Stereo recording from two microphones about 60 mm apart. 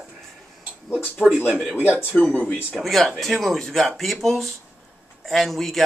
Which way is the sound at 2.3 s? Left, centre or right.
Left.